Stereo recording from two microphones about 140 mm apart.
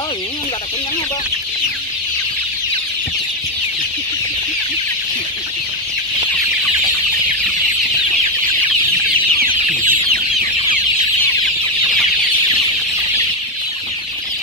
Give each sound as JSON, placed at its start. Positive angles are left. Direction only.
{"t": 9.4, "sound": "chicken", "side_deg": -90}